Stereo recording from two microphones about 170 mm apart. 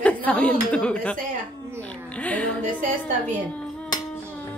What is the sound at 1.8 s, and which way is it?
Music, 10° left (ahead or behind).